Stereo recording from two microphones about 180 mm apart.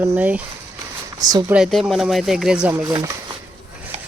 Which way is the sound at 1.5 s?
Centre (ahead or behind).